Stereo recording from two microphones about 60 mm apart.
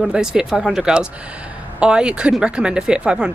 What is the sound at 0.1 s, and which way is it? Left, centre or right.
A woman's voice, centre.